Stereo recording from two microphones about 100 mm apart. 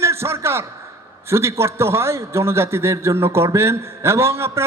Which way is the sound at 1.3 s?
25° right (ahead or behind).